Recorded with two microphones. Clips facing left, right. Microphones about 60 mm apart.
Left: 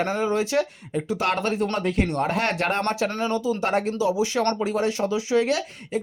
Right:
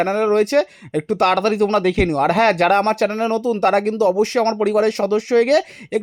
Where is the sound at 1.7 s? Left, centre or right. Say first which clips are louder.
Right 7 dB; right.